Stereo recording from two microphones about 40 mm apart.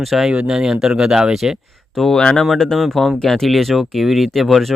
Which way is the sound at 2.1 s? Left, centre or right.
Left.